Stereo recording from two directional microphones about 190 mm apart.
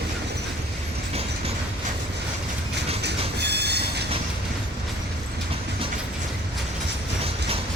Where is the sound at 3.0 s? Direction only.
60° right (ahead or behind).